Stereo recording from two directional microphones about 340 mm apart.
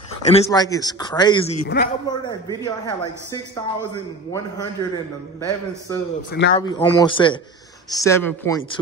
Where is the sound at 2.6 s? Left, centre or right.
Centre.